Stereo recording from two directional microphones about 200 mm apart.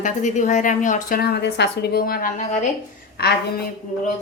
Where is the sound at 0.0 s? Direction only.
40° left (ahead or behind).